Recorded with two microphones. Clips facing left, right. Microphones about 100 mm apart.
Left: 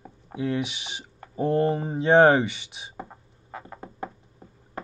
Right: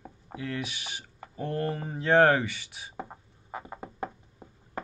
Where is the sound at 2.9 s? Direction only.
10° right (ahead or behind).